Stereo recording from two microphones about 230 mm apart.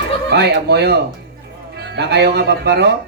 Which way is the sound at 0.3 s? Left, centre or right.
Right.